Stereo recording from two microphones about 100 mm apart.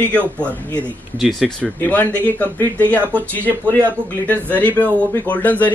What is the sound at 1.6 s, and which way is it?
Speech, 15° left (ahead or behind).